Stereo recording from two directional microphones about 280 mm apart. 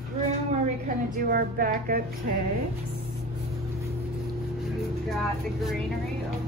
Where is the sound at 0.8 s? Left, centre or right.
Right.